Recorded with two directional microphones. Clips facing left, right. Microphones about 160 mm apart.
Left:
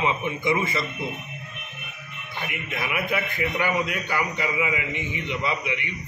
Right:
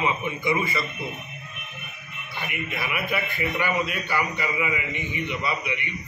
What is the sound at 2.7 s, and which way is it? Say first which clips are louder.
A man's voice: left 2 dB; 20° left (ahead or behind).